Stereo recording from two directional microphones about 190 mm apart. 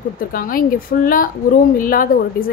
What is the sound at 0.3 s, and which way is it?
A woman's voice, 50° left (ahead or behind).